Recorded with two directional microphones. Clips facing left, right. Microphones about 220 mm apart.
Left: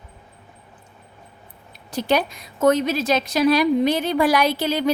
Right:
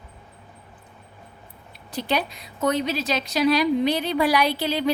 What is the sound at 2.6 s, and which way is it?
A woman's voice, 50° left (ahead or behind).